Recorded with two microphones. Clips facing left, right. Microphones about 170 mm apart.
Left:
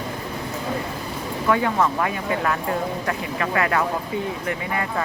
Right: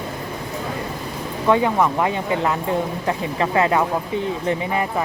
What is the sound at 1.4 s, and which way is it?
Speech, 20° right (ahead or behind).